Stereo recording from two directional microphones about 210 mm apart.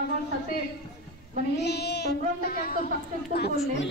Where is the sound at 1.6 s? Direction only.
50° left (ahead or behind).